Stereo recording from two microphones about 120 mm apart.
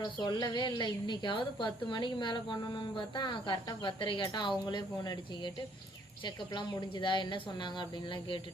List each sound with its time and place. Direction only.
0.0 s a woman's voice: 35° left (ahead or behind)